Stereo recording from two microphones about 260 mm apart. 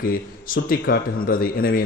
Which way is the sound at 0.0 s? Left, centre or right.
Left.